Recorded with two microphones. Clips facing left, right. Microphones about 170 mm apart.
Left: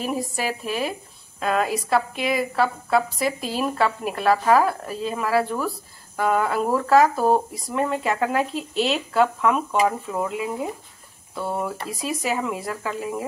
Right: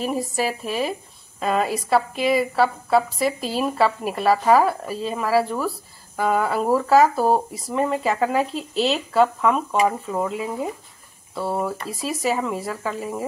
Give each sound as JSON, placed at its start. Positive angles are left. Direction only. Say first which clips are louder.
{"t": 0.0, "sound": "speech", "louder": "right 2 dB", "side_deg": 0}